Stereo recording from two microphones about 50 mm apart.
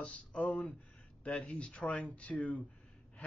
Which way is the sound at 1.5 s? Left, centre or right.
Left.